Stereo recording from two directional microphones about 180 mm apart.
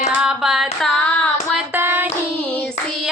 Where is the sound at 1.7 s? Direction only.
10° right (ahead or behind).